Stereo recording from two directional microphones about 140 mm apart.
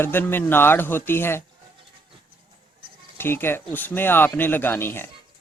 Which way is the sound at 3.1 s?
15° left (ahead or behind).